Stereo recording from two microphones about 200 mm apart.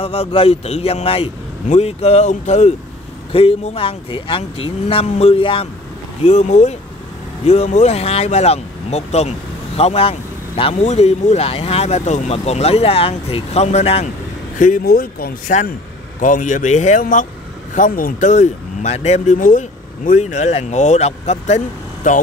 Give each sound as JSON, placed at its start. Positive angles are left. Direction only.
{"t": 0.0, "sound": "speech", "side_deg": 30}
{"t": 14.6, "sound": "speech", "side_deg": 45}